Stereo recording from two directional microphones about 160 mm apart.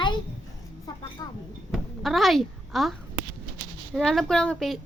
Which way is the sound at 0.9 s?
25° left (ahead or behind).